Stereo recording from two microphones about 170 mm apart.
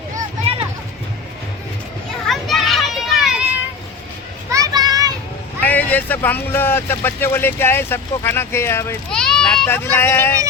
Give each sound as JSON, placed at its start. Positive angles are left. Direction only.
{"t": 0.5, "sound": "a sound", "side_deg": -35}
{"t": 2.2, "sound": "children playing", "side_deg": 0}
{"t": 4.5, "sound": "children playing", "side_deg": -20}
{"t": 5.6, "sound": "speech", "side_deg": 10}
{"t": 9.0, "sound": "speech", "side_deg": 5}